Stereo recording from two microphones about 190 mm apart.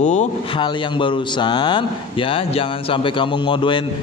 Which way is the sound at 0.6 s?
25° left (ahead or behind).